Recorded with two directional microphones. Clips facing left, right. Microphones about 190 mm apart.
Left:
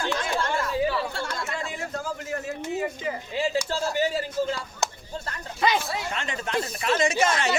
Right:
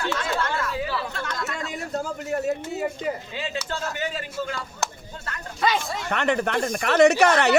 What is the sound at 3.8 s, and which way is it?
Speech, 30° left (ahead or behind).